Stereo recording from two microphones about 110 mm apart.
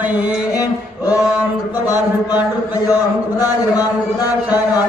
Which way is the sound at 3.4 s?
35° left (ahead or behind).